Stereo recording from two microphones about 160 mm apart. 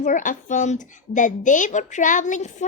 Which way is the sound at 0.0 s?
55° left (ahead or behind).